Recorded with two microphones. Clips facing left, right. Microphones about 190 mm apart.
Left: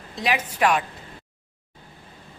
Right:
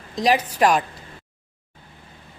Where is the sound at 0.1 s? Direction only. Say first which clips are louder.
Right 6 dB; 35° right (ahead or behind).